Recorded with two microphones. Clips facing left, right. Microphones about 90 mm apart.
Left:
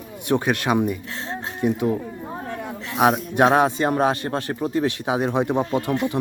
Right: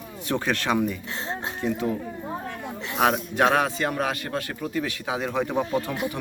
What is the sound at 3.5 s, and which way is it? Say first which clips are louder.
Speech: left 5 dB; 25° left (ahead or behind).